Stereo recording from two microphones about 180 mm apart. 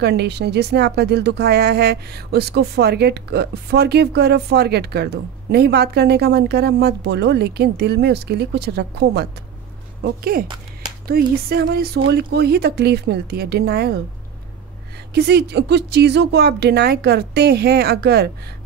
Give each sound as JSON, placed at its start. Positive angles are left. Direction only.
{"t": 0.0, "sound": "speech", "side_deg": -65}
{"t": 15.1, "sound": "speech", "side_deg": -65}